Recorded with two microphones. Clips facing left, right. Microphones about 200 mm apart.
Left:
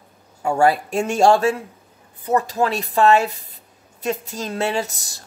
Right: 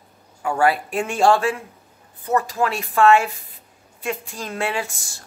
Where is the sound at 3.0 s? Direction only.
40° left (ahead or behind).